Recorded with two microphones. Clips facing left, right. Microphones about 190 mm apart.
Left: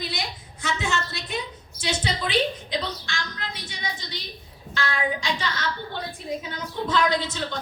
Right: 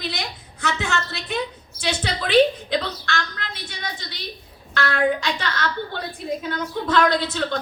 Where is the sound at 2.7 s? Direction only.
65° right (ahead or behind).